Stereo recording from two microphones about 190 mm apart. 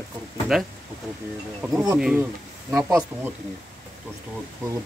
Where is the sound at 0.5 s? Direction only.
Centre (ahead or behind).